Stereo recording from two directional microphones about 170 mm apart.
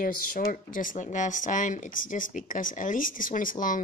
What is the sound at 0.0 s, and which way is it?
Speech, 55° left (ahead or behind).